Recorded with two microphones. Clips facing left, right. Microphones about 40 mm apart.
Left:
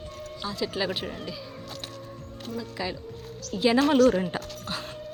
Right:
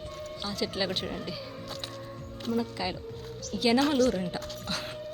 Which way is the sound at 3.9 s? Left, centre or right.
Left.